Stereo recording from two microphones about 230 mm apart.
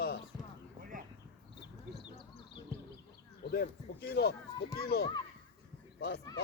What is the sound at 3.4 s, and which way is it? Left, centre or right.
Speech, left.